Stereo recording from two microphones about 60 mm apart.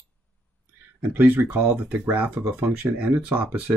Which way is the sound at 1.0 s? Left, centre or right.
Right.